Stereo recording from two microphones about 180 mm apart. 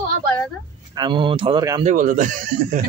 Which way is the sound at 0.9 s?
25° right (ahead or behind).